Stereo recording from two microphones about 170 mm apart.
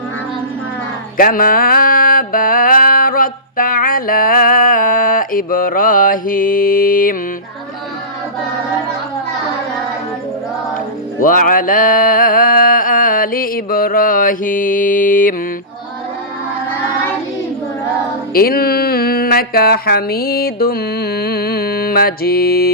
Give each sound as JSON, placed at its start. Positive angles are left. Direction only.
{"t": 1.1, "sound": "mantra", "side_deg": 55}
{"t": 11.2, "sound": "a sound", "side_deg": 55}
{"t": 18.3, "sound": "speech", "side_deg": 60}